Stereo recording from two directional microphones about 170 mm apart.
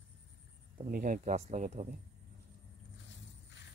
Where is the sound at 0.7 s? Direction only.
50° right (ahead or behind).